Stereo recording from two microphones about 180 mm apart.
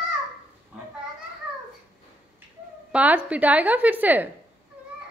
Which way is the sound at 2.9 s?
10° right (ahead or behind).